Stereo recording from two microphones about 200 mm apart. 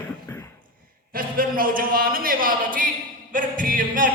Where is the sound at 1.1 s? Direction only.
45° right (ahead or behind).